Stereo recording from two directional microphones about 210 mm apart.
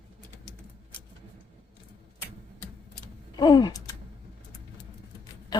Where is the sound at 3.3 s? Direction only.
20° left (ahead or behind).